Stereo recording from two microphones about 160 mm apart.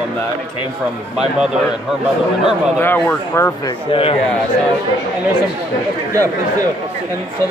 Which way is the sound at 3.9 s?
35° left (ahead or behind).